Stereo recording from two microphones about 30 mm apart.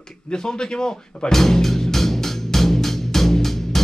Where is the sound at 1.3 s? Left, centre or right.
Centre.